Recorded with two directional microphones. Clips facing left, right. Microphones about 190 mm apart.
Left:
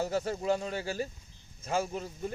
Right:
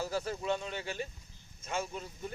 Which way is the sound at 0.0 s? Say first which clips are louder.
Left 4 dB; 30° left (ahead or behind).